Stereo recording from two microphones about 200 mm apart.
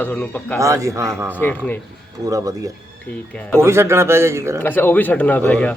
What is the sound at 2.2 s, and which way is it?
Speech, 15° right (ahead or behind).